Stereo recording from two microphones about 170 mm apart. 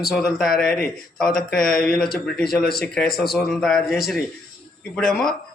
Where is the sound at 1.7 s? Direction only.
5° left (ahead or behind).